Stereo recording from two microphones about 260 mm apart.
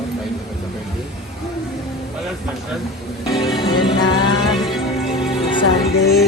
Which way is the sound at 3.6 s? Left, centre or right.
Centre.